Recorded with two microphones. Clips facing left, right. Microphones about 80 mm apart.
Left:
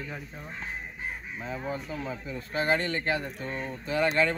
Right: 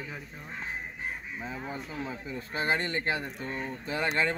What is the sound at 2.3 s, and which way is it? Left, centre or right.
Speech, right.